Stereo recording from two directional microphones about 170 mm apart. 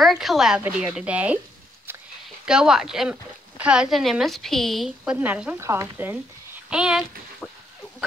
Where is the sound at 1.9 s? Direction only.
15° right (ahead or behind).